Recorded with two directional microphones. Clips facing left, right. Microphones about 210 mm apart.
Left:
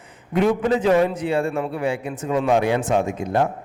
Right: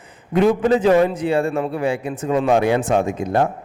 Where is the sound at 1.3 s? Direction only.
35° right (ahead or behind).